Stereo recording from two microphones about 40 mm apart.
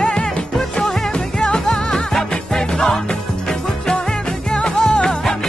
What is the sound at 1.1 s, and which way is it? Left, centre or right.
Music, left.